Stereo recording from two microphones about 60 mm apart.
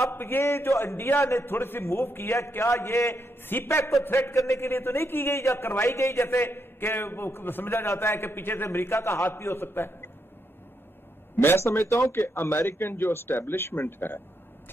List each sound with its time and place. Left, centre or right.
0.1 s a man's voice: left
3.7 s a man's voice: left
4.0 s a man's voice: left
4.4 s a man's voice: left
11.3 s a man's voice: left